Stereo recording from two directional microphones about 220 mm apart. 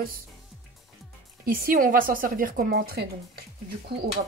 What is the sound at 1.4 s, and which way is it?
A woman's voice, 40° right (ahead or behind).